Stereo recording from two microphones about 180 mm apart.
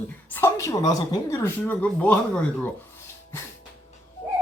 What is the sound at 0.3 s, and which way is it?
A woman's voice, 10° left (ahead or behind).